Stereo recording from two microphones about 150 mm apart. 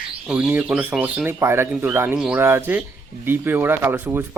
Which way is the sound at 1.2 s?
15° right (ahead or behind).